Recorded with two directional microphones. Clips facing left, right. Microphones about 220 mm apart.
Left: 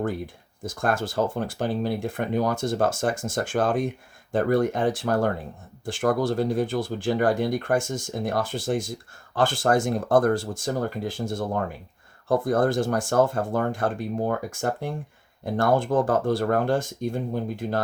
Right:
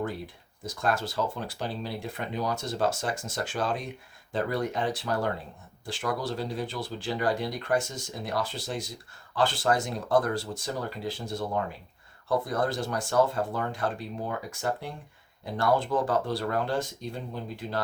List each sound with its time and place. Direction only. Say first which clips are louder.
0.6 s speech: left 3 dB; 50° left (ahead or behind)